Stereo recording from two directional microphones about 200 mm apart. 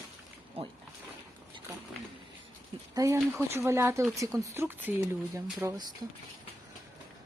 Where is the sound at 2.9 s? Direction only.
15° right (ahead or behind).